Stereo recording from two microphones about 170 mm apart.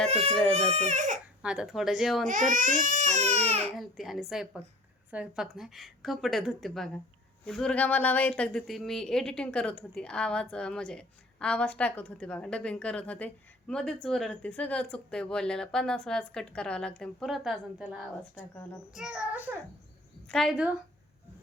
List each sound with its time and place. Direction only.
0.1 s speech: 35° right (ahead or behind)
1.4 s a woman's voice: 5° right (ahead or behind)
2.5 s speech: 50° right (ahead or behind)
3.8 s a woman's voice: centre (ahead or behind)
20.2 s a woman's voice: centre (ahead or behind)